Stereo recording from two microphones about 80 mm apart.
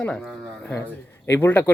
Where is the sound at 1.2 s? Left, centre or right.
Left.